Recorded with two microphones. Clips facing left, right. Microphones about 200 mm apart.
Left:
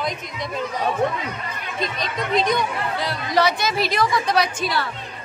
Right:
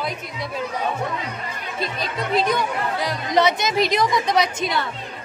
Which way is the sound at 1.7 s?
5° right (ahead or behind).